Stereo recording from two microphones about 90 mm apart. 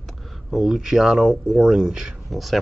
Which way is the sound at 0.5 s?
5° right (ahead or behind).